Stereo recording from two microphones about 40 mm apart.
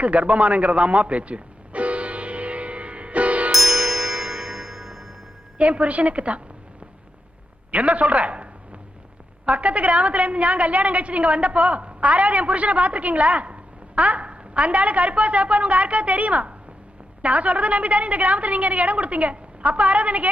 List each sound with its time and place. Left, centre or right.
0.0 s music: right
3.5 s tubular bells: centre
5.5 s a woman's voice: right
7.7 s a sound: right
9.5 s a woman's voice: right